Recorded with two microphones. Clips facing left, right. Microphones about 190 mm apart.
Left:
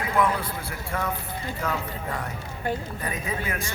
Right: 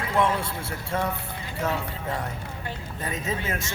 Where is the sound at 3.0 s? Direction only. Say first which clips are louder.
Right 1 dB; 25° right (ahead or behind).